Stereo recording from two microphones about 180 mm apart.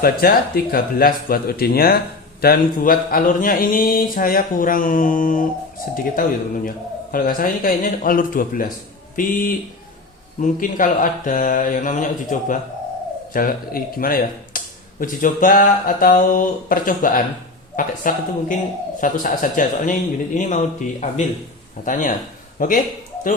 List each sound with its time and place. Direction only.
0.0 s speech: 55° left (ahead or behind)
10.4 s a man's voice: 50° left (ahead or behind)